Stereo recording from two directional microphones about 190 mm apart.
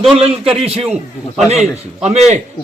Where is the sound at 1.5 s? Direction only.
35° right (ahead or behind).